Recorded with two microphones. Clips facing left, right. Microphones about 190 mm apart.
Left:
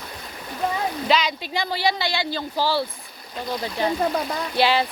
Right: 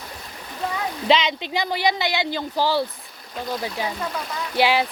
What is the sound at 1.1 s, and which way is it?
Speech, 25° right (ahead or behind).